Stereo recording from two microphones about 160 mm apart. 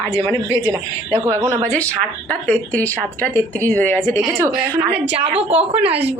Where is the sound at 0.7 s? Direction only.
20° right (ahead or behind).